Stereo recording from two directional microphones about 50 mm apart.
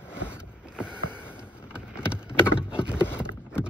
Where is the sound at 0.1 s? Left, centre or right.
Right.